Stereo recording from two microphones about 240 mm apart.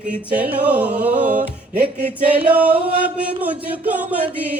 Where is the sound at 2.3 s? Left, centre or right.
Centre.